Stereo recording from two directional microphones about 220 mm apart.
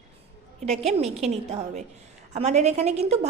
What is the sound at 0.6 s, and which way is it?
A woman's voice, 30° right (ahead or behind).